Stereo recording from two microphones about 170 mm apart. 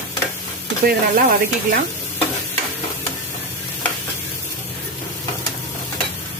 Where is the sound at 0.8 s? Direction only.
60° right (ahead or behind).